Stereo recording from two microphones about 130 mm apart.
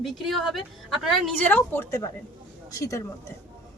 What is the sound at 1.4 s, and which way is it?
A woman's voice, 15° left (ahead or behind).